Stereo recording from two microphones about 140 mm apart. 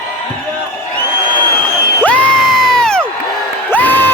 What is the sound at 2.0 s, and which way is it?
Crowd, 10° left (ahead or behind).